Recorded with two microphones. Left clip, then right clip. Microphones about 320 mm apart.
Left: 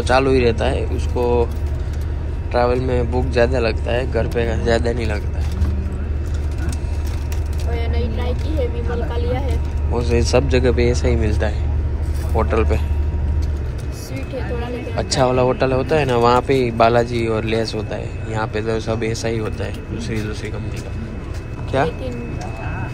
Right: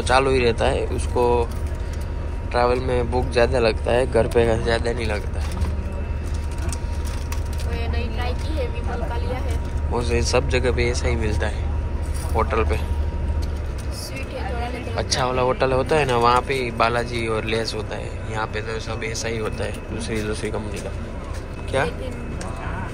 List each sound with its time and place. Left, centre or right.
0.0 s speech: centre
2.5 s speech: centre
9.9 s speech: centre
15.0 s speech: centre